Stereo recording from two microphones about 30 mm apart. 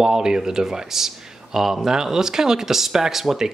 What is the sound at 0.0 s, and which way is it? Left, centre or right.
Speech, right.